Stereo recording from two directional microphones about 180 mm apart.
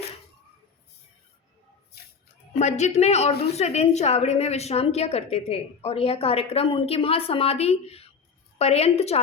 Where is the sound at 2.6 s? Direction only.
40° left (ahead or behind).